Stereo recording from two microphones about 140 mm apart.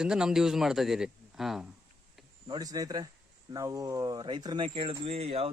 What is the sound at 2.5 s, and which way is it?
Speech, 25° right (ahead or behind).